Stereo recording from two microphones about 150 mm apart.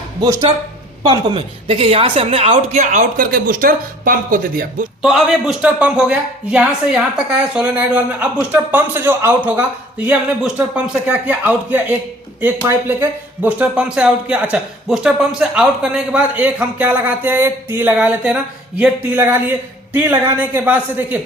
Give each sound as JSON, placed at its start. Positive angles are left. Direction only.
{"t": 0.2, "sound": "speech", "side_deg": -25}
{"t": 1.0, "sound": "a woman's voice", "side_deg": -35}
{"t": 5.0, "sound": "a woman's voice", "side_deg": 0}